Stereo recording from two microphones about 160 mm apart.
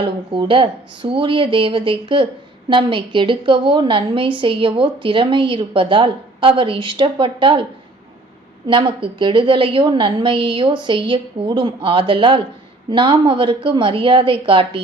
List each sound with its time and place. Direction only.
0.0 s a woman's voice: 30° right (ahead or behind)
8.6 s a woman's voice: 30° right (ahead or behind)